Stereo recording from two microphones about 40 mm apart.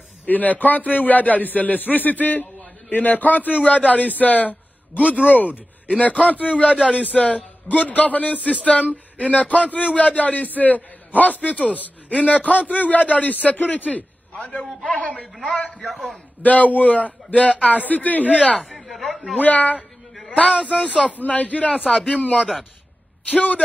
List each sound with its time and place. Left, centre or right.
0.2 s a man's voice: left
15.8 s a man's voice: centre
16.4 s a man's voice: left
18.6 s a man's voice: centre
19.4 s a man's voice: left
20.2 s a sound: left
20.6 s a man's voice: left